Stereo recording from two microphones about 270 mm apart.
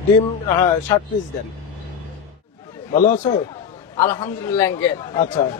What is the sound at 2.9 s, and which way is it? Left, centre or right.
Speech, left.